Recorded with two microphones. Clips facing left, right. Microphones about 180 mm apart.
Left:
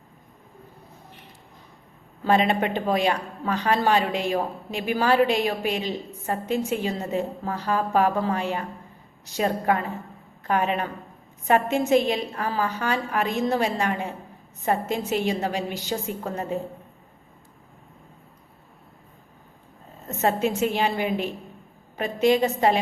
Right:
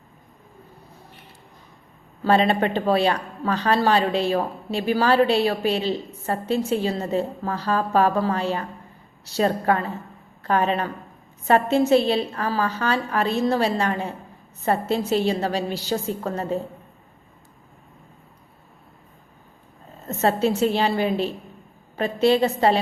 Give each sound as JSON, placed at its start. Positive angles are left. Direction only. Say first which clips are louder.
{"t": 2.2, "sound": "a woman's voice", "louder": "right 2 dB", "side_deg": 15}
{"t": 20.1, "sound": "a woman's voice", "louder": "right 3 dB", "side_deg": 15}